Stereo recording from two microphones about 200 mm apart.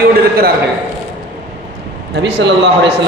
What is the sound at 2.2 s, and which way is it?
Speech, 60° right (ahead or behind).